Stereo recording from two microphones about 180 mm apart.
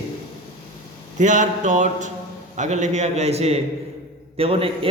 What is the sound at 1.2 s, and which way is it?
A man's voice, 45° right (ahead or behind).